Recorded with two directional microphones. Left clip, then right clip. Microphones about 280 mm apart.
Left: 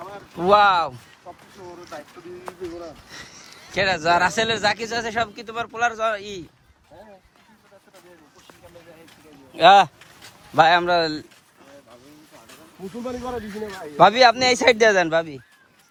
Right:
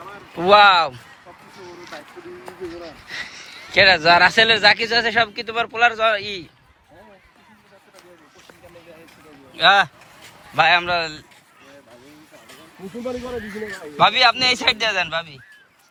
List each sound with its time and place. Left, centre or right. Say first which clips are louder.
0.3 s speech: right 4 dB; centre
9.6 s a man's voice: left 2 dB; centre
13.9 s a man's voice: left 1 dB; left